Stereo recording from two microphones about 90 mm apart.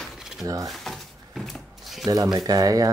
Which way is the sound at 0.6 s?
Centre (ahead or behind).